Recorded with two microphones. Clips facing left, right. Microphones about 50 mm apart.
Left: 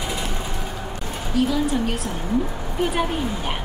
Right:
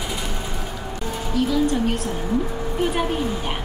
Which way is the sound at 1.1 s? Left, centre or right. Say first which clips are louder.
Even; centre.